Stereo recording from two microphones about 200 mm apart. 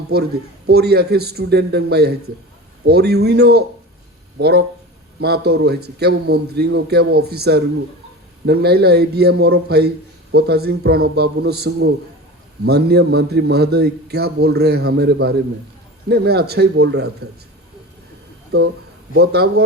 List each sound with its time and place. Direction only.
0.1 s a man's voice: 50° right (ahead or behind)
18.5 s a man's voice: 55° right (ahead or behind)